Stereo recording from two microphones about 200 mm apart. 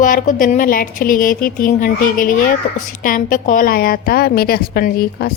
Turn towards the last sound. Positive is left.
turn(degrees=45)  # may be behind; listen again after turning